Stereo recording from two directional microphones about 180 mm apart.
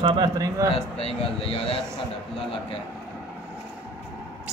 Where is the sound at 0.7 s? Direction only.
35° left (ahead or behind).